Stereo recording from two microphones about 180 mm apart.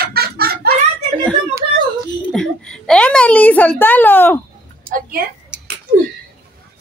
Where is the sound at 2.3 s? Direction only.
5° left (ahead or behind).